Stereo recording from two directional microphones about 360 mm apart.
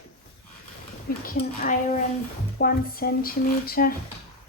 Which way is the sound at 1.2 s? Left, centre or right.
Left.